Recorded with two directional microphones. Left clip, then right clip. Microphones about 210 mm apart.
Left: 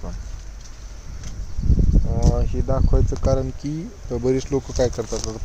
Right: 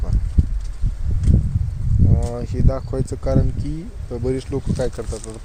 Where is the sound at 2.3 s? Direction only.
10° right (ahead or behind).